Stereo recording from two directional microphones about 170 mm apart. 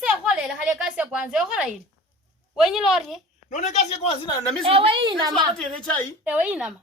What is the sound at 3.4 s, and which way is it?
Speech, 45° left (ahead or behind).